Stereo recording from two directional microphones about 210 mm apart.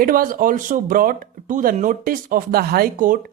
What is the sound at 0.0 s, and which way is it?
Speech, 45° right (ahead or behind).